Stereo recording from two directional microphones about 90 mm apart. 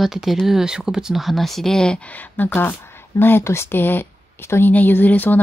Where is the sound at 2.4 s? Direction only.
20° left (ahead or behind).